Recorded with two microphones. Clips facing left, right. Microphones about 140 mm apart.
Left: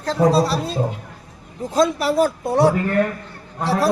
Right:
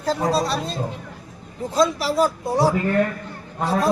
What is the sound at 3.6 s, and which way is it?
Speech, 85° left.